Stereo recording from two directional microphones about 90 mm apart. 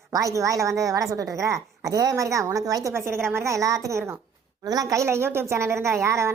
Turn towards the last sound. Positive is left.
turn(degrees=-30)  # may be behind; listen again after turning